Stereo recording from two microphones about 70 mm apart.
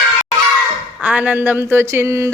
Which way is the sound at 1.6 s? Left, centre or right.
Right.